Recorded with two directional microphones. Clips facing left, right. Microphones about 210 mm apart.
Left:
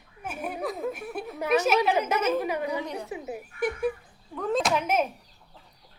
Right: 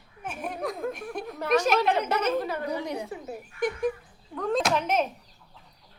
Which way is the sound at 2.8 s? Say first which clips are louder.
Right 2 dB; 15° right (ahead or behind).